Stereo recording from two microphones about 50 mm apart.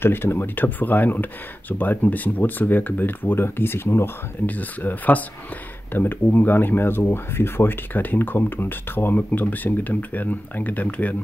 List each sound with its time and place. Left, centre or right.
0.0 s speech: left
4.5 s speech: left